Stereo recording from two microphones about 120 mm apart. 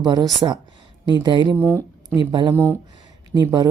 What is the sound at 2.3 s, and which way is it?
Speech, 40° right (ahead or behind).